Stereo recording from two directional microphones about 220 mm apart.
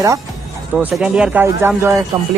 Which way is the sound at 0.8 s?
5° right (ahead or behind).